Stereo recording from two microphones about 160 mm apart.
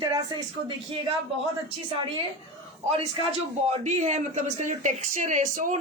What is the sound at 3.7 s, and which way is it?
A woman's voice, 45° right (ahead or behind).